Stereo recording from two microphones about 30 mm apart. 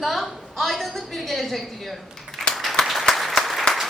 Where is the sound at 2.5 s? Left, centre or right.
Centre.